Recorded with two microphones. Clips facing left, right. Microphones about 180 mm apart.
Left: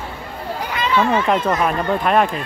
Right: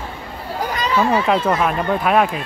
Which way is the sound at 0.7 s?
40° right (ahead or behind).